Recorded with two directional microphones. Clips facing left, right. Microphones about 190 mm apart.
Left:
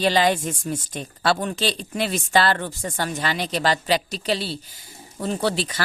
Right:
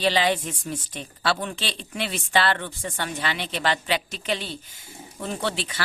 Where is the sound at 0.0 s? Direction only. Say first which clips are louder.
Left 3 dB; 45° left (ahead or behind).